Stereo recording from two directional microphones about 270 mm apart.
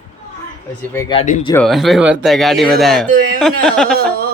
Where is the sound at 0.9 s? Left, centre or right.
Centre.